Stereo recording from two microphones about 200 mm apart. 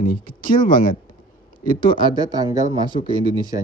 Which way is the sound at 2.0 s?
20° right (ahead or behind).